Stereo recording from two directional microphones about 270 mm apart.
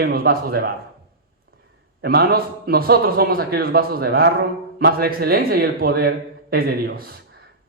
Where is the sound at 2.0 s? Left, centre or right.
Right.